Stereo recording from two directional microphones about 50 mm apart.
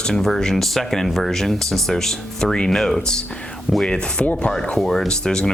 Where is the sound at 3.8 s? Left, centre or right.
Centre.